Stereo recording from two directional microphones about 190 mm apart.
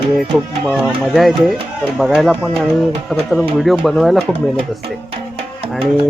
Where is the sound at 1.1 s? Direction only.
Centre (ahead or behind).